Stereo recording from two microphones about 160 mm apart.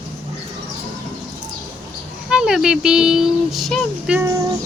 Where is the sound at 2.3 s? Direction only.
5° right (ahead or behind).